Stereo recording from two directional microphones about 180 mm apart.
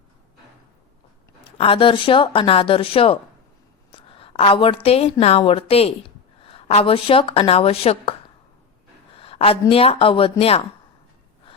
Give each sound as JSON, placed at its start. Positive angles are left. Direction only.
{"t": 1.5, "sound": "a woman's voice", "side_deg": 30}
{"t": 9.1, "sound": "speech", "side_deg": 30}